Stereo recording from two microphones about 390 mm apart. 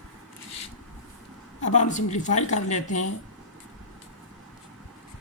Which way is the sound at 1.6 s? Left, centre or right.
Centre.